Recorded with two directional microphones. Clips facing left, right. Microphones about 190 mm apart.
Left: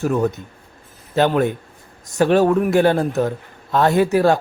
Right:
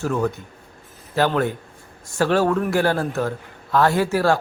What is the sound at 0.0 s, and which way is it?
A man's voice, 20° left (ahead or behind).